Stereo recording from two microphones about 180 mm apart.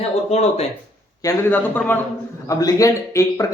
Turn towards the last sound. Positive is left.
turn(degrees=15)  # may be behind; listen again after turning